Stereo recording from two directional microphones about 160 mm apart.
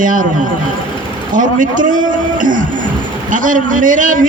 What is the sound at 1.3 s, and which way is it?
A man's voice, 55° right (ahead or behind).